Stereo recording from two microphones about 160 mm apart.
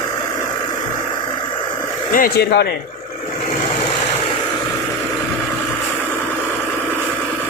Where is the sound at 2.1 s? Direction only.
65° left (ahead or behind).